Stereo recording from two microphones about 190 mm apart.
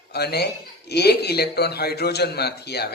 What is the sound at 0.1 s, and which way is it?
Speech, 60° left (ahead or behind).